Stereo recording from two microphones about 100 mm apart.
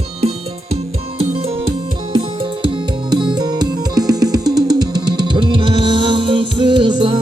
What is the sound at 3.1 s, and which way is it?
Music, 45° right (ahead or behind).